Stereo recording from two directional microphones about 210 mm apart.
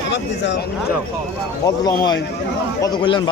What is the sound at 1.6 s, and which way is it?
Speech, 20° left (ahead or behind).